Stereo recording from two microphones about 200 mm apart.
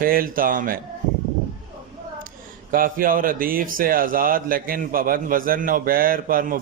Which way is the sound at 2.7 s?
45° right (ahead or behind).